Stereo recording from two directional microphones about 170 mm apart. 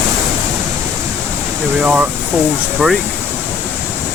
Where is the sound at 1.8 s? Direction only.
10° right (ahead or behind).